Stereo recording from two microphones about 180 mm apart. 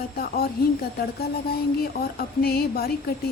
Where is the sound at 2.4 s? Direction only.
60° left (ahead or behind).